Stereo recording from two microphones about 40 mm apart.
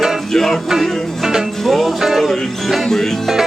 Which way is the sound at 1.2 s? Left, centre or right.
Centre.